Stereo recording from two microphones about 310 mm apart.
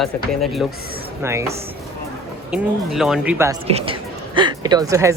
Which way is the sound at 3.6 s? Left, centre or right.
Centre.